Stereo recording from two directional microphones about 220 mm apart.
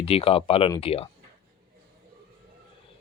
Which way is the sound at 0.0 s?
25° left (ahead or behind).